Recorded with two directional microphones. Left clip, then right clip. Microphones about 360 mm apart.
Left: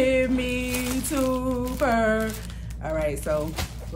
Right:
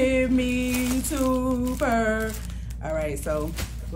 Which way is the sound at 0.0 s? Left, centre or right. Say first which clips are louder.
Even; centre.